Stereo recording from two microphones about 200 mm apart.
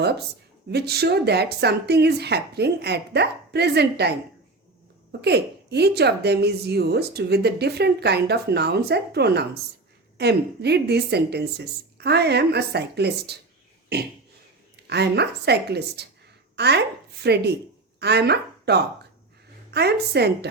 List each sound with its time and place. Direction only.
0.7 s speech: 55° right (ahead or behind)
5.2 s speech: 55° right (ahead or behind)
13.9 s a sound: 55° right (ahead or behind)
14.8 s speech: 55° right (ahead or behind)